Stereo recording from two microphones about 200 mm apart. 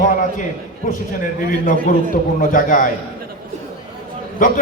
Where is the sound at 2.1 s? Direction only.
40° left (ahead or behind).